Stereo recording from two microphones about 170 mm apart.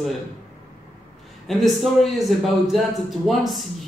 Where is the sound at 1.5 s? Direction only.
Centre (ahead or behind).